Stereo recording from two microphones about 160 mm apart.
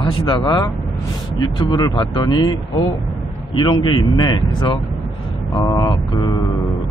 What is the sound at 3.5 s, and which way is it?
Speech, 30° left (ahead or behind).